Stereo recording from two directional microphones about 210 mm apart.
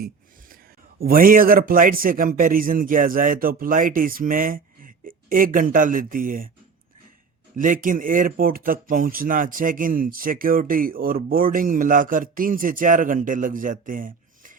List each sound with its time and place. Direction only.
0.9 s speech: 45° right (ahead or behind)
7.5 s speech: 40° right (ahead or behind)